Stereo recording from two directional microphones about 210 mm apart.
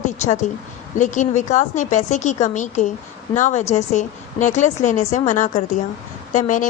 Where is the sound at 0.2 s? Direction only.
35° left (ahead or behind).